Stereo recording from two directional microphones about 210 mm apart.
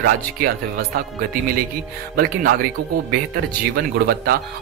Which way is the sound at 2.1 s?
45° right (ahead or behind).